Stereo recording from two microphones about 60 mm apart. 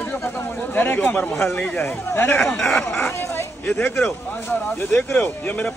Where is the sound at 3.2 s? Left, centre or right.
Left.